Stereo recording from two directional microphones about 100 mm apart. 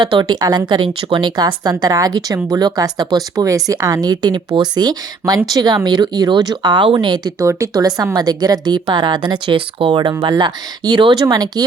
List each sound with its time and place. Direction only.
0.0 s speech: 50° right (ahead or behind)
7.3 s speech: 35° right (ahead or behind)